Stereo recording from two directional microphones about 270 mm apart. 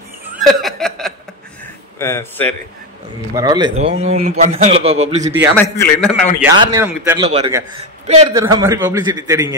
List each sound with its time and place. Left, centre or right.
0.3 s chuckle: centre
2.0 s a man's voice: centre
3.3 s a man's voice: centre
5.6 s a man's voice: centre
6.4 s a man's voice: centre
7.2 s a man's voice: right
8.4 s a man's voice: centre